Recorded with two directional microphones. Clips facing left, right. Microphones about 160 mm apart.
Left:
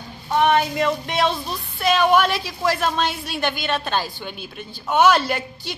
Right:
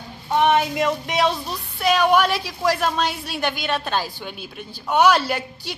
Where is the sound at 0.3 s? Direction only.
20° right (ahead or behind).